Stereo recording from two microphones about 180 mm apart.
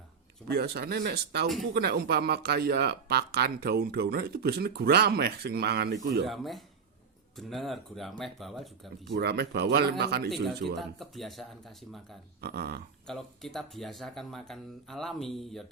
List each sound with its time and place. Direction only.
0.4 s speech: 60° right (ahead or behind)
6.2 s speech: centre (ahead or behind)
9.1 s speech: 60° right (ahead or behind)
10.2 s speech: centre (ahead or behind)
12.4 s speech: 60° right (ahead or behind)
13.1 s speech: centre (ahead or behind)